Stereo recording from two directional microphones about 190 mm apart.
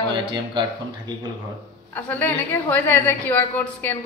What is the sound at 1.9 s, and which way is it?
A woman's voice, 10° left (ahead or behind).